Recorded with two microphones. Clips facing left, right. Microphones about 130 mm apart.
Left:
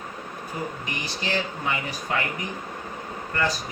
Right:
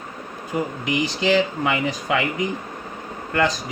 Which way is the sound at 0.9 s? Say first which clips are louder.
Right 10 dB; 90° right.